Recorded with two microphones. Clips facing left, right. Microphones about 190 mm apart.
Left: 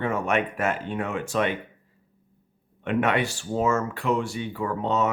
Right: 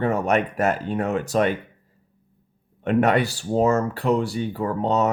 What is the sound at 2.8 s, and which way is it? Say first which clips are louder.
Speech: right 4 dB; 40° right (ahead or behind).